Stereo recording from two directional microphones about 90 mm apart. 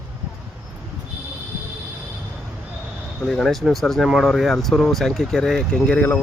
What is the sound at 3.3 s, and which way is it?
Speech, centre (ahead or behind).